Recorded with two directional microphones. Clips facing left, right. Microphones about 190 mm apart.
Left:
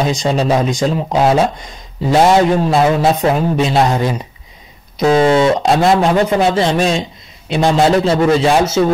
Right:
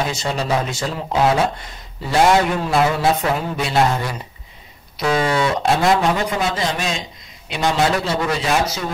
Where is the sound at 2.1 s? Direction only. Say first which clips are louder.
Left 5 dB; 25° left (ahead or behind).